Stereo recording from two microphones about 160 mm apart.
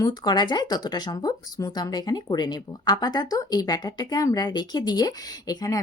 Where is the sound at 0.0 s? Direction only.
25° left (ahead or behind).